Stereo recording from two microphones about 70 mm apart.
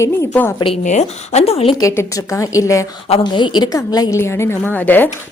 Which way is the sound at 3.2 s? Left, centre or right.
Left.